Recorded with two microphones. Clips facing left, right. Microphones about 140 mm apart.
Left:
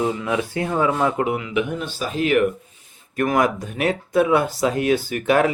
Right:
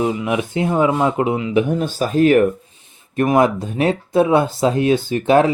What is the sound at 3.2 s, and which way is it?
Speech, 25° right (ahead or behind).